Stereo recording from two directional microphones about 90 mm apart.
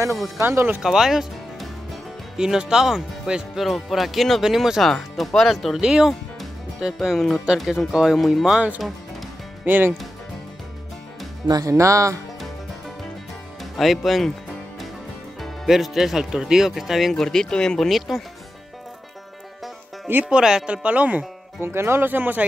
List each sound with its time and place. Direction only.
0.4 s speech: 30° right (ahead or behind)
0.8 s speech: 5° right (ahead or behind)
9.7 s speech: 20° right (ahead or behind)
11.4 s speech: 40° right (ahead or behind)
13.7 s speech: centre (ahead or behind)
15.4 s speech: centre (ahead or behind)
20.2 s speech: 10° right (ahead or behind)